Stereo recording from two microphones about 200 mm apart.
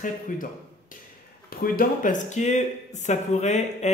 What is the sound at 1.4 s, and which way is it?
Speech, 45° left (ahead or behind).